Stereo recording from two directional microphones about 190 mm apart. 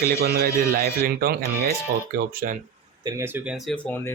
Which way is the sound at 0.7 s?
50° right (ahead or behind).